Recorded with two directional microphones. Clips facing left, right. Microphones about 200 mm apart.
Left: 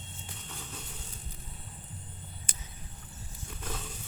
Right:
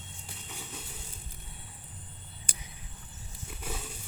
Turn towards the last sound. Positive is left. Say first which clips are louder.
# even
turn(degrees=-10)  # may be behind; listen again after turning